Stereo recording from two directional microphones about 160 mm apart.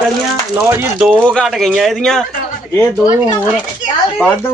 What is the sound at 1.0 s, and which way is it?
A man's voice, 5° left (ahead or behind).